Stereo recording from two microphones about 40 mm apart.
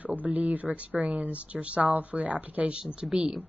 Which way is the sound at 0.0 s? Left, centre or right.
Right.